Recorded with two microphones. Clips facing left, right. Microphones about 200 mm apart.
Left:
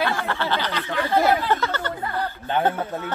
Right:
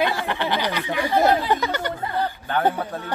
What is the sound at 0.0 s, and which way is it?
Speech, 15° right (ahead or behind).